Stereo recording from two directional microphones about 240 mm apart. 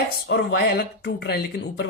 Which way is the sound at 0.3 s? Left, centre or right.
Left.